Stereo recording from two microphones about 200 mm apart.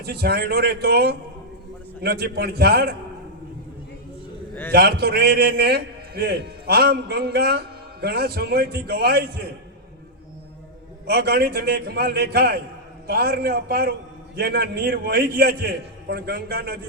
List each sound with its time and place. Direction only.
0.0 s a man's voice: 50° right (ahead or behind)
4.7 s a man's voice: 50° right (ahead or behind)
11.0 s a man's voice: 50° right (ahead or behind)